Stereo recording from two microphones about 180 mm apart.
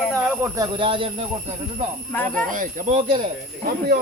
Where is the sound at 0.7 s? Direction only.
30° right (ahead or behind).